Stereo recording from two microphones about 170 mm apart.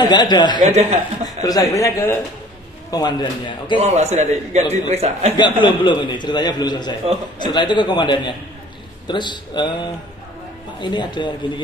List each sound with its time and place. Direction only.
0.0 s a man's voice: 25° left (ahead or behind)
0.6 s a man's voice: 40° right (ahead or behind)
1.4 s a man's voice: 20° left (ahead or behind)
3.7 s a man's voice: 40° right (ahead or behind)
5.4 s a man's voice: 25° left (ahead or behind)